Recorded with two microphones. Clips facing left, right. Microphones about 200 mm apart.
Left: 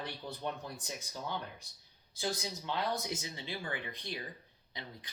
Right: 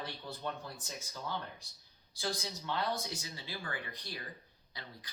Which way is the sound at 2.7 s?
20° left (ahead or behind).